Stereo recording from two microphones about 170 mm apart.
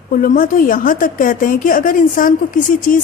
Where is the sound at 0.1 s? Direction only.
55° left (ahead or behind).